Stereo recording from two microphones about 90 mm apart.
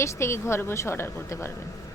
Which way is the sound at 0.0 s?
30° left (ahead or behind).